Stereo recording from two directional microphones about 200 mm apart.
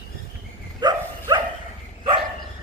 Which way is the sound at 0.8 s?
20° right (ahead or behind).